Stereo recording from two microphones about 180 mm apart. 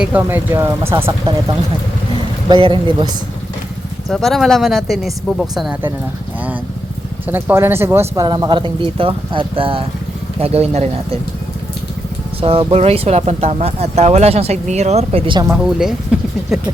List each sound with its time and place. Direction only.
0.0 s speech: 10° right (ahead or behind)
2.5 s speech: 25° right (ahead or behind)
4.1 s speech: centre (ahead or behind)
7.3 s speech: 10° right (ahead or behind); by 11.2 s 35° right (ahead or behind)
12.4 s speech: 30° right (ahead or behind)
15.5 s speech: 5° right (ahead or behind)